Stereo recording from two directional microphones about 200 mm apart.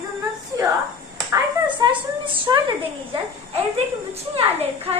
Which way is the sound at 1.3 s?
25° right (ahead or behind).